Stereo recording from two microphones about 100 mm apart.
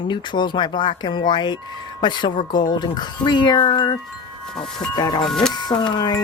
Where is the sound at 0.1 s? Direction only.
50° left (ahead or behind).